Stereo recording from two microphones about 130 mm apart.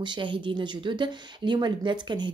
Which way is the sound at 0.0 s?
40° right (ahead or behind).